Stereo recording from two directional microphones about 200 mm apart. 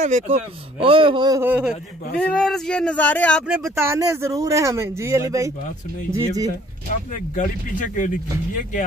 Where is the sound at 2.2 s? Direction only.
5° left (ahead or behind).